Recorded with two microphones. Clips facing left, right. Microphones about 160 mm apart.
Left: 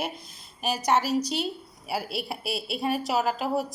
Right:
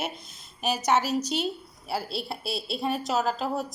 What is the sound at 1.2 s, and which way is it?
Speech, 40° left (ahead or behind).